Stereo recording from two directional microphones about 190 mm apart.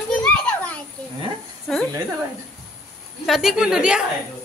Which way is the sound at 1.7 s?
5° left (ahead or behind).